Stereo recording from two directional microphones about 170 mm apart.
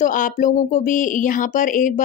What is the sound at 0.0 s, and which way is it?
Speech, 50° left (ahead or behind).